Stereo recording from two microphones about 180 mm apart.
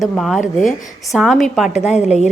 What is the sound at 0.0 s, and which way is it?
A woman's voice, centre (ahead or behind).